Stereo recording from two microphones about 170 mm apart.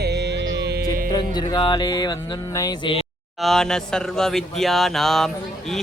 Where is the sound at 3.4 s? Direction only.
Centre (ahead or behind).